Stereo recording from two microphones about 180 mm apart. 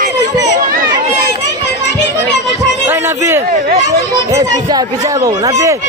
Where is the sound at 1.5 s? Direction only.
70° left (ahead or behind).